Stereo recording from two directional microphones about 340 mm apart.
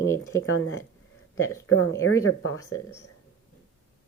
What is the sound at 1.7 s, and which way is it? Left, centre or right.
Speech, left.